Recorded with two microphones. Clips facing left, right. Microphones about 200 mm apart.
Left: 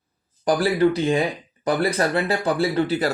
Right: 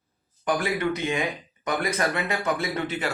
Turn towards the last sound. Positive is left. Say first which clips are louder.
# left 8 dB
turn(degrees=35)  # may be behind; listen again after turning